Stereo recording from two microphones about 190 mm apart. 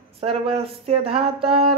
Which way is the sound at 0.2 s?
30° right (ahead or behind).